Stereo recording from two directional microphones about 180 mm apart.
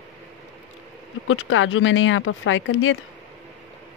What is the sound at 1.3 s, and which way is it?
Speech, 90° left.